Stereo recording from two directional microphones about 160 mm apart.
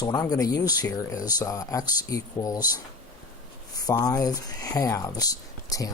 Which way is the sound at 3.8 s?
25° left (ahead or behind).